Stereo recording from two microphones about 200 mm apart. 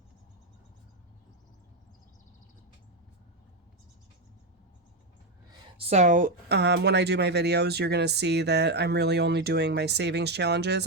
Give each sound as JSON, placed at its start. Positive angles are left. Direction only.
{"t": 5.7, "sound": "speech", "side_deg": -30}